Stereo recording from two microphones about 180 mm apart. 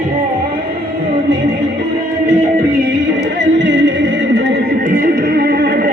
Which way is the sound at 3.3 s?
75° right (ahead or behind).